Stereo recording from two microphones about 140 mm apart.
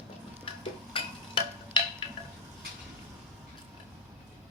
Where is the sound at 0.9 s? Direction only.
40° left (ahead or behind).